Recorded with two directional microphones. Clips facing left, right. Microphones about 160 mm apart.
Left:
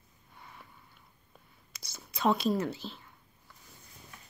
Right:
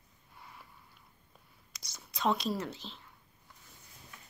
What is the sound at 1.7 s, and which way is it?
Speech, 5° left (ahead or behind).